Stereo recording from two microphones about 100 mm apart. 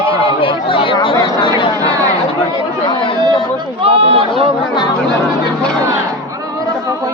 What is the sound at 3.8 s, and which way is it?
Run, 75° right (ahead or behind).